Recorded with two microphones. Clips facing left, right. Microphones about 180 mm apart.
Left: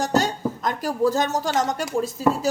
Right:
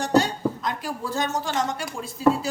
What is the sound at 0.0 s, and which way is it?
A woman's voice, 45° left (ahead or behind).